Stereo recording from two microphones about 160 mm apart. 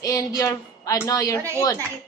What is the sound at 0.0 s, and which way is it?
A woman's voice, 20° left (ahead or behind).